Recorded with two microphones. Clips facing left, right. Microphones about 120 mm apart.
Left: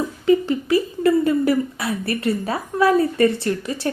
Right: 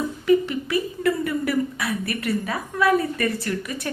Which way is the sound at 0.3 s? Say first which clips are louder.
Left 3 dB; 30° left (ahead or behind).